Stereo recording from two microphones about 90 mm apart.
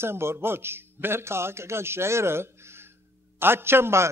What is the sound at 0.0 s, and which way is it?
A man's voice, 25° right (ahead or behind).